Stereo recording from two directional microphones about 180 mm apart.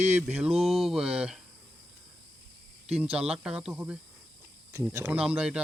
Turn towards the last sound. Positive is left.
turn(degrees=-5)  # may be behind; listen again after turning